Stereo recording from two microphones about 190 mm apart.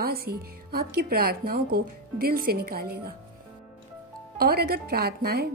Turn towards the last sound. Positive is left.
turn(degrees=-55)  # may be behind; listen again after turning